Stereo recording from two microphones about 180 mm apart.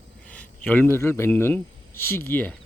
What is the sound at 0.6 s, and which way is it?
A man's voice, 10° left (ahead or behind).